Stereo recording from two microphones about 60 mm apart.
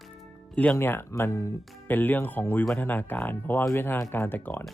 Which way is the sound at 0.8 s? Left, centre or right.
Left.